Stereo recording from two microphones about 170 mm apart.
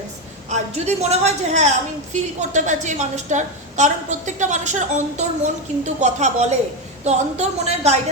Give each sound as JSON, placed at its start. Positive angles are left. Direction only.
{"t": 0.5, "sound": "a woman's voice", "side_deg": -40}